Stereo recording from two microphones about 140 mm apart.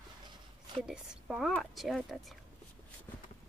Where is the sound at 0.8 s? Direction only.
5° right (ahead or behind).